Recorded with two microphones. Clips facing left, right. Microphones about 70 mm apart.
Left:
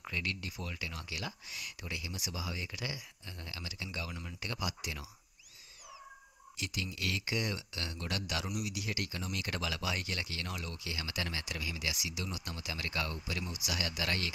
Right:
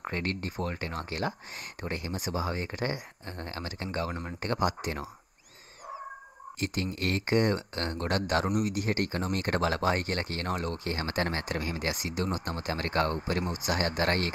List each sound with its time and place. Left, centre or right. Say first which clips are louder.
0.0 s speech: right 6 dB; right
6.6 s speech: right 7 dB; right